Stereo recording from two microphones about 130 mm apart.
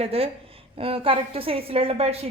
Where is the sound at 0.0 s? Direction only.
50° right (ahead or behind).